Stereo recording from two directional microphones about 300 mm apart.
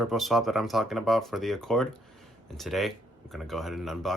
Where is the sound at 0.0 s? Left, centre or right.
Centre.